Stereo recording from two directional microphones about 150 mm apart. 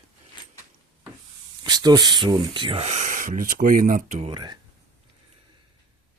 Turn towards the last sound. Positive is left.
turn(degrees=-30)  # may be behind; listen again after turning